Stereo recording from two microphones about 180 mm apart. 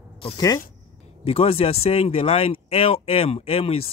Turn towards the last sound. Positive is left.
turn(degrees=30)  # may be behind; listen again after turning